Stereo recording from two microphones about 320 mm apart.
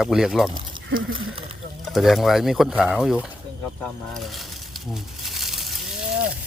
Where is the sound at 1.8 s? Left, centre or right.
Centre.